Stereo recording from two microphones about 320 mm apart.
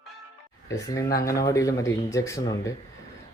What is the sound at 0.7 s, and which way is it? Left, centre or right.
Speech, centre.